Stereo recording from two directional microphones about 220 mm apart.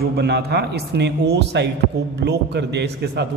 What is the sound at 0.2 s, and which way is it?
A man's voice, 50° right (ahead or behind).